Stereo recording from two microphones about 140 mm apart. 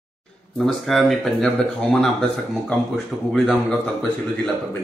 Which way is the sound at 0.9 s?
Centre (ahead or behind).